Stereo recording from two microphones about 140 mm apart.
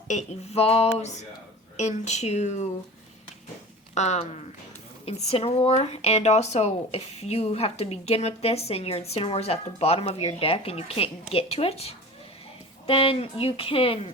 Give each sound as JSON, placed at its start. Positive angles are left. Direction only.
{"t": 0.1, "sound": "speech", "side_deg": 50}
{"t": 3.9, "sound": "speech", "side_deg": 55}